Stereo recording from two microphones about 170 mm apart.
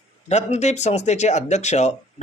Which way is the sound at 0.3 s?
40° left (ahead or behind).